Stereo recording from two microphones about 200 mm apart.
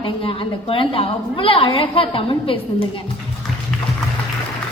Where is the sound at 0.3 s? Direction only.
25° left (ahead or behind).